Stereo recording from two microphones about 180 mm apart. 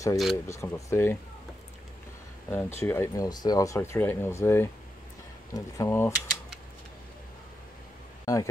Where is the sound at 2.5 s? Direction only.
15° left (ahead or behind).